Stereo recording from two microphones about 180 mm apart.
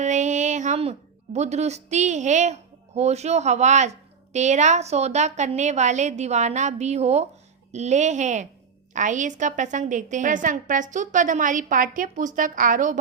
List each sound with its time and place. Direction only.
0.0 s a woman's voice: 40° right (ahead or behind)